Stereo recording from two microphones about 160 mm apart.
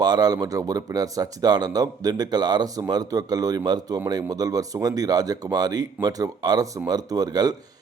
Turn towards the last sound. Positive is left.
turn(degrees=-25)  # may be behind; listen again after turning